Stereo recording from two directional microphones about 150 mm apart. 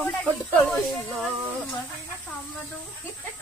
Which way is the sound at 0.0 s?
10° left (ahead or behind).